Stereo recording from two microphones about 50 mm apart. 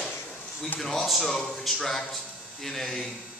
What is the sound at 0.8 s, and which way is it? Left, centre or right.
A man's voice, centre.